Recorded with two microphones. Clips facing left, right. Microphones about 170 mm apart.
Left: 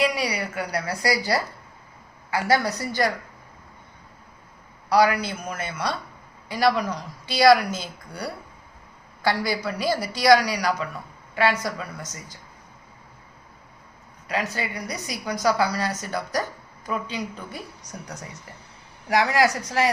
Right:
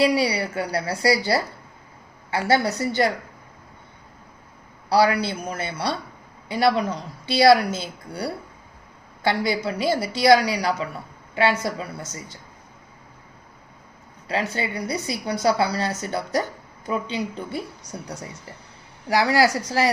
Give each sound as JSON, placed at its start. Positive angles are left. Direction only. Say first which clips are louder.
{"t": 0.0, "sound": "a woman's voice", "louder": "right 4 dB", "side_deg": -30}
{"t": 4.9, "sound": "a man's voice", "louder": "right 1 dB", "side_deg": -30}
{"t": 14.3, "sound": "a woman's voice", "louder": "right 2 dB", "side_deg": -30}
{"t": 19.0, "sound": "a man's voice", "louder": "right 1 dB", "side_deg": -35}